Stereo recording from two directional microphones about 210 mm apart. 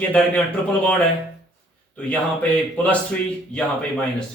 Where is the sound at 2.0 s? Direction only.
5° left (ahead or behind).